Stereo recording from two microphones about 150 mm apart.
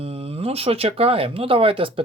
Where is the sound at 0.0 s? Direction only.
40° right (ahead or behind).